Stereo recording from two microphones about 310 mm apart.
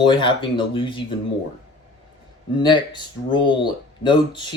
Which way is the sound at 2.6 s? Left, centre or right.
Centre.